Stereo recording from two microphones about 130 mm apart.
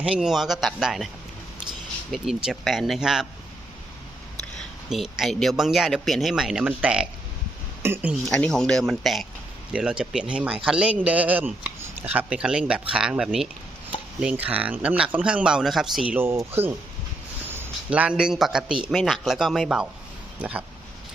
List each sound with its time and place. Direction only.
0.0 s a man's voice: 5° right (ahead or behind)
2.1 s a man's voice: 5° right (ahead or behind)
5.1 s a man's voice: centre (ahead or behind)
7.8 s speech: 20° right (ahead or behind)
8.3 s a man's voice: 5° left (ahead or behind)
16.1 s a man's voice: 20° right (ahead or behind)